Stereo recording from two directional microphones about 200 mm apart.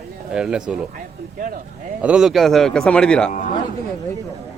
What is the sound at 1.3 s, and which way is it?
Speech, 45° right (ahead or behind).